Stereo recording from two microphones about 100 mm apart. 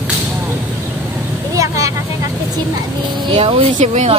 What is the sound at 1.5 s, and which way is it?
Vehicle, 35° right (ahead or behind).